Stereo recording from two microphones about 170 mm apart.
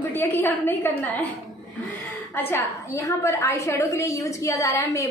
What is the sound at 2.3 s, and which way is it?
A woman's voice, 15° left (ahead or behind).